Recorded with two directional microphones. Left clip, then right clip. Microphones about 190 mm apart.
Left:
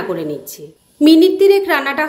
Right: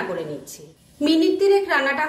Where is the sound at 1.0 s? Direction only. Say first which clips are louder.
Left 8 dB; 45° left (ahead or behind).